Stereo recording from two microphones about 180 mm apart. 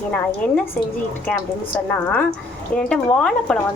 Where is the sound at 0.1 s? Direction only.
5° left (ahead or behind).